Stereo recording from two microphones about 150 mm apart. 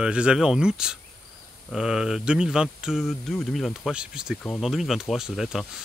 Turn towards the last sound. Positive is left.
turn(degrees=0)  # may be behind; listen again after turning